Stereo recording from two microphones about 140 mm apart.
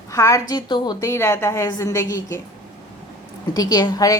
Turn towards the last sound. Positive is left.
turn(degrees=25)  # may be behind; listen again after turning